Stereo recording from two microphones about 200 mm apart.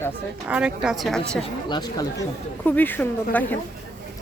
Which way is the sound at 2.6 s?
10° left (ahead or behind).